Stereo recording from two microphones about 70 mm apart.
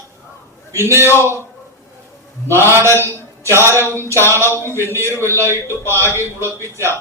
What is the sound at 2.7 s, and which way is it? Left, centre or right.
Music, right.